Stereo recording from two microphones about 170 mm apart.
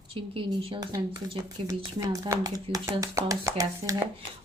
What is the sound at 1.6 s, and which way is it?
Speech, 20° right (ahead or behind).